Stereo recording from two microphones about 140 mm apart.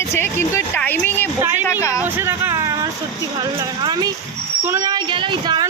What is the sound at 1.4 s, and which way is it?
Speech, 15° right (ahead or behind).